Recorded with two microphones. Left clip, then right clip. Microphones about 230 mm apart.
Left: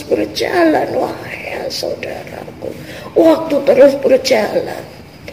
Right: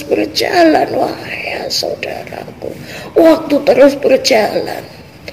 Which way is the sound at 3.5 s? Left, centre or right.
Right.